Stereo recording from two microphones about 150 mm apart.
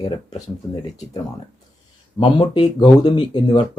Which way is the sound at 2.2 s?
30° left (ahead or behind).